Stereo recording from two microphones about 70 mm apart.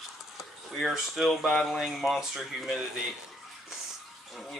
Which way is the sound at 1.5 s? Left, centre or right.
Centre.